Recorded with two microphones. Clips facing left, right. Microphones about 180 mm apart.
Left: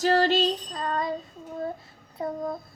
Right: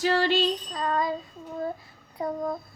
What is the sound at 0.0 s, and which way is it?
Music, 40° left (ahead or behind).